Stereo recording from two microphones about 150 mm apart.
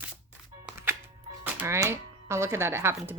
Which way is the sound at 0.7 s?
15° right (ahead or behind).